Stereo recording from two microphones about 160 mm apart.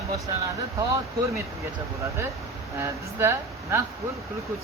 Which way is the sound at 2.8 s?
20° right (ahead or behind).